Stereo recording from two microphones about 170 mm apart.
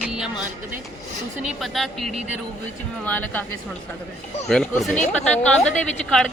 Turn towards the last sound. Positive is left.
turn(degrees=5)  # may be behind; listen again after turning